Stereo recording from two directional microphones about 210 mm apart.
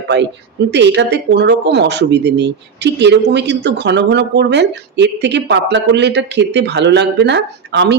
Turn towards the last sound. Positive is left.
turn(degrees=-55)  # may be behind; listen again after turning